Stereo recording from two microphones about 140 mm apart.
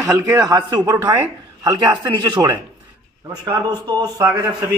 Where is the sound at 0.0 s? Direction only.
20° right (ahead or behind).